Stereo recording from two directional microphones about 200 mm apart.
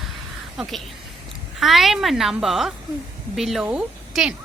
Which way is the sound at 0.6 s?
Centre (ahead or behind).